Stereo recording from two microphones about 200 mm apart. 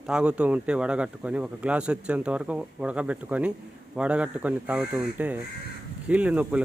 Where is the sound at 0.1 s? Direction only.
5° right (ahead or behind).